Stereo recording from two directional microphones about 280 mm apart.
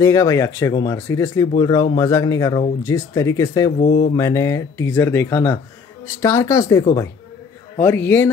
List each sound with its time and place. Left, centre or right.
0.0 s speech: centre
3.8 s mantra: left
4.2 s speech: centre